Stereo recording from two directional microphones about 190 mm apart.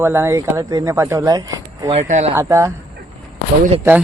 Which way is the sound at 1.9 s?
35° right (ahead or behind).